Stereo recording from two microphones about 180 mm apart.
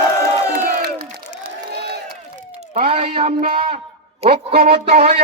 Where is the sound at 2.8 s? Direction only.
30° right (ahead or behind).